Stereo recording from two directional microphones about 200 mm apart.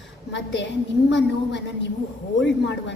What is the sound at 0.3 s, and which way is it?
A woman's voice, 60° left (ahead or behind).